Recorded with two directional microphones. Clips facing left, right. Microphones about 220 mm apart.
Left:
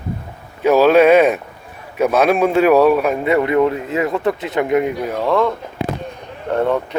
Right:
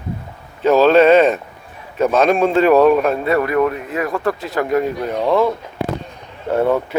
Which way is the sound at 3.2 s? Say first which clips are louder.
Left 1 dB; 20° left (ahead or behind).